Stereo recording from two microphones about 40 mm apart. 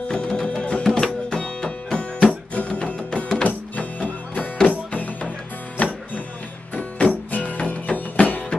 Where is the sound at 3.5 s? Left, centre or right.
Left.